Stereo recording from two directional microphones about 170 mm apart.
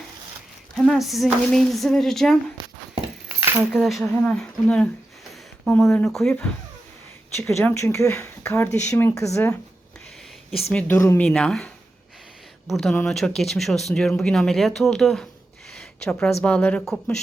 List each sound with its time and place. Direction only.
0.8 s speech: centre (ahead or behind)
2.6 s horse: 30° right (ahead or behind)
3.4 s keys jangling: 15° right (ahead or behind)
3.7 s speech: centre (ahead or behind); by 9.6 s 15° left (ahead or behind)
10.7 s speech: 10° left (ahead or behind)
15.7 s a sound: 5° left (ahead or behind)
16.4 s speech: 10° left (ahead or behind)